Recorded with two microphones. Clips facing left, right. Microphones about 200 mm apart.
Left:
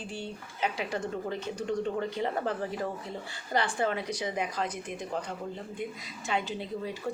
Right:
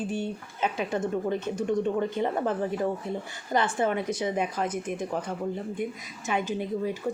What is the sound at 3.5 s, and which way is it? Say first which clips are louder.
Speech: right 3 dB; 20° right (ahead or behind).